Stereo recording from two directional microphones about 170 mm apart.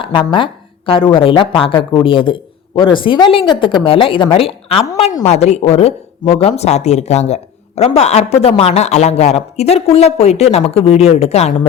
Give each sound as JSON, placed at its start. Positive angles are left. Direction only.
{"t": 0.0, "sound": "speech", "side_deg": 30}